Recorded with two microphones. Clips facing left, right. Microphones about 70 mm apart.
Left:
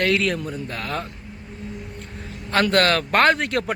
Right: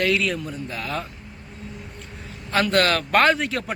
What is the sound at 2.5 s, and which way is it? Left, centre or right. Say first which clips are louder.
Speech: left 1 dB; left.